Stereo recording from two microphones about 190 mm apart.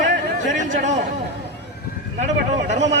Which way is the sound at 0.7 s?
40° right (ahead or behind).